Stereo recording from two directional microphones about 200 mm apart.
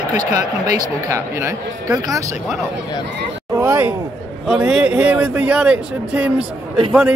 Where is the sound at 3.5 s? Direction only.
10° right (ahead or behind).